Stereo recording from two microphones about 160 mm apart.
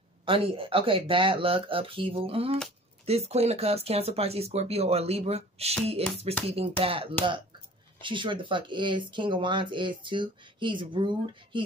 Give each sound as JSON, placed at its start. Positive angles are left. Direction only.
{"t": 0.2, "sound": "speech", "side_deg": -35}